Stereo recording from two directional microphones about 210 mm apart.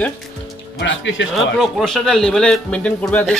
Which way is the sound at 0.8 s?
60° left (ahead or behind).